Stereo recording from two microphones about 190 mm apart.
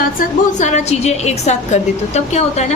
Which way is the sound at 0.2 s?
40° left (ahead or behind).